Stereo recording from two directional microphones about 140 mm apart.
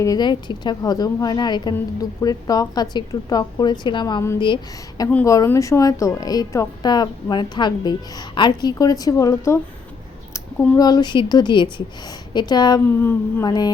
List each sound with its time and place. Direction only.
0.0 s a woman's voice: 30° left (ahead or behind)
5.2 s a woman's voice: 25° left (ahead or behind)
10.8 s speech: 30° left (ahead or behind)
13.0 s speech: 15° left (ahead or behind)
13.4 s a woman's voice: 30° left (ahead or behind)